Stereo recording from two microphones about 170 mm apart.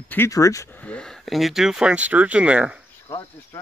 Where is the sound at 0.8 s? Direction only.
5° left (ahead or behind).